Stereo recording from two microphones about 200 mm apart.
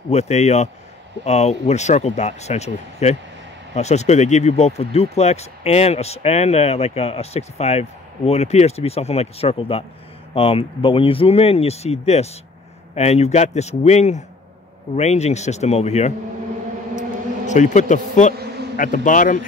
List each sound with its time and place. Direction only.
0.1 s speech: 35° left (ahead or behind)
17.5 s speech: 35° left (ahead or behind)